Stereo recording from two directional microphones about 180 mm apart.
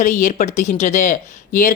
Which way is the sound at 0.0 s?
45° left (ahead or behind).